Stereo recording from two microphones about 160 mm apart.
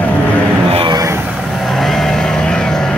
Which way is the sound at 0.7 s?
35° right (ahead or behind).